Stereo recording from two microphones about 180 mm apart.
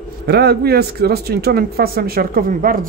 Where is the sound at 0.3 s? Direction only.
65° right (ahead or behind).